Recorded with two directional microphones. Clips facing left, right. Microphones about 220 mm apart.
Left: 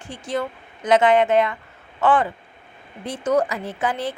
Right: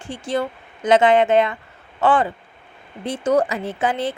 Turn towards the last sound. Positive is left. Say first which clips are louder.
# right 3 dB
turn(degrees=-25)  # may be behind; listen again after turning